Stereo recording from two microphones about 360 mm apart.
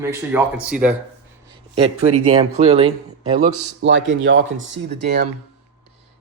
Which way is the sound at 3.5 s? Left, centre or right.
Right.